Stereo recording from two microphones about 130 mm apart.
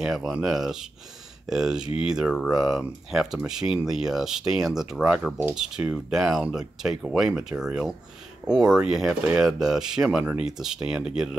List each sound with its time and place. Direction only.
0.0 s speech: 5° right (ahead or behind)